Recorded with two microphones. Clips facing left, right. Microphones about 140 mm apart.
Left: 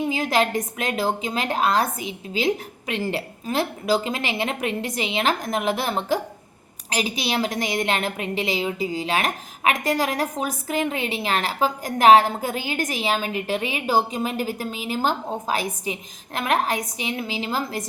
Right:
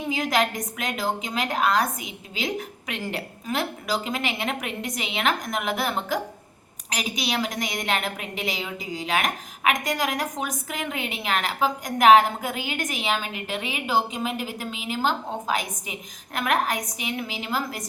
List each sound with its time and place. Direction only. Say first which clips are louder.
0.1 s a woman's voice: right 2 dB; 30° left (ahead or behind)